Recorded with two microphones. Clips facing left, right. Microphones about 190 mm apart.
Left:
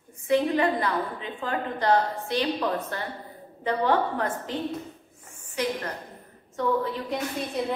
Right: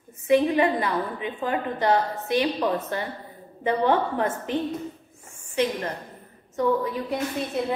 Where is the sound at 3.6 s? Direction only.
20° right (ahead or behind).